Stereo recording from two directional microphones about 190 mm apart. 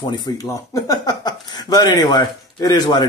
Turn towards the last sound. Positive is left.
turn(degrees=20)  # may be behind; listen again after turning